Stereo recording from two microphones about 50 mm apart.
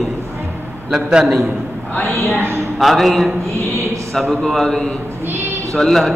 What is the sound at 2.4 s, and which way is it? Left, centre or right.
Speech, right.